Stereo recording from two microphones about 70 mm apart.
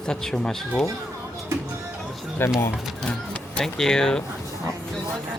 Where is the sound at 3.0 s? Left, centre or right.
Centre.